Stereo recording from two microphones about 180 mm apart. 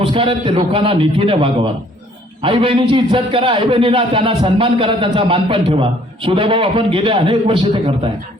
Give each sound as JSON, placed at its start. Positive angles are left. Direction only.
{"t": 0.0, "sound": "a man's voice", "side_deg": -30}